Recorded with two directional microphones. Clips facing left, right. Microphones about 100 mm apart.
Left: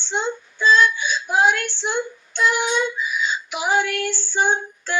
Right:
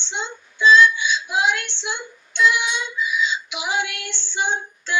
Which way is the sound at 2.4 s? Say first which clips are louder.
Even; 45° left (ahead or behind).